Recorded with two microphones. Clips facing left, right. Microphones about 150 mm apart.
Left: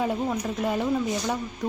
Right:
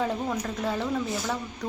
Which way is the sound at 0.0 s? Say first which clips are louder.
Left 2 dB; 15° left (ahead or behind).